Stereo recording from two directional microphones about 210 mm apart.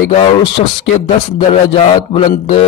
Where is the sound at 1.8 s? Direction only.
30° left (ahead or behind).